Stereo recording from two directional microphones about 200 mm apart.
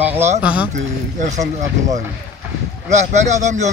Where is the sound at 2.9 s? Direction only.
35° right (ahead or behind).